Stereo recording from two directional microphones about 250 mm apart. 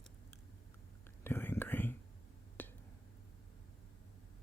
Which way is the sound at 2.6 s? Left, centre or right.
Centre.